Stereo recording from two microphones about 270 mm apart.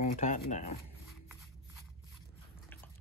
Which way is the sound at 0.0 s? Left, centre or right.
Left.